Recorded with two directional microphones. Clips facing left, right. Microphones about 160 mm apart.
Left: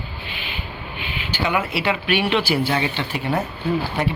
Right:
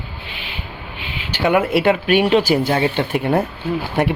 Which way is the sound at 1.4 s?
55° right (ahead or behind).